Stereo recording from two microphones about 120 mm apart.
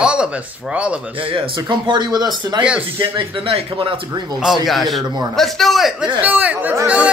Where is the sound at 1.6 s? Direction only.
40° right (ahead or behind).